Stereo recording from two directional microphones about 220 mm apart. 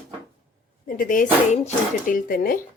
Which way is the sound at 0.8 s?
40° left (ahead or behind).